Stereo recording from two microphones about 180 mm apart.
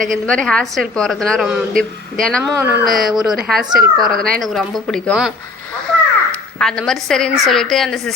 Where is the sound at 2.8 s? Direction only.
55° right (ahead or behind).